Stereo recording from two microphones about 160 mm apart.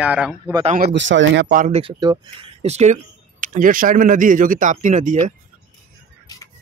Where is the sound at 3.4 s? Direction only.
55° right (ahead or behind).